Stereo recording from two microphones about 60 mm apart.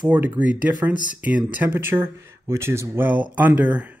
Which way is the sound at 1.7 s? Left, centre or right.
Right.